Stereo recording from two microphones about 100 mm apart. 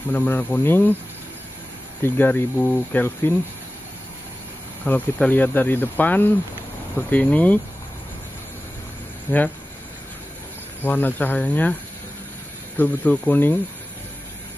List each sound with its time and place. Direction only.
0.1 s speech: 15° left (ahead or behind)
2.0 s speech: 20° left (ahead or behind)
4.8 s speech: 20° left (ahead or behind)
9.3 s speech: 20° left (ahead or behind)
10.8 s speech: 20° left (ahead or behind)
12.7 s speech: 15° left (ahead or behind)